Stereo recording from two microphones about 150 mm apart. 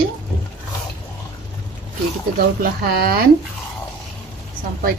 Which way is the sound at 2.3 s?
90° right.